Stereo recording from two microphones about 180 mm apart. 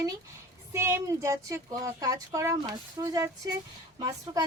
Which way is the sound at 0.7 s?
15° right (ahead or behind).